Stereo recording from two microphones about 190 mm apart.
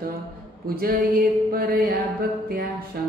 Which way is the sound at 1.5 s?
50° right (ahead or behind).